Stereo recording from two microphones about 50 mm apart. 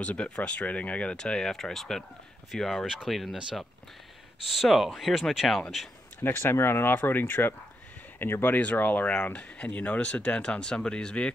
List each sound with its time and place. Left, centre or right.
0.0 s speech: left
1.1 s speech: centre
4.5 s speech: centre
6.2 s speech: left
8.5 s speech: left; by 11.3 s centre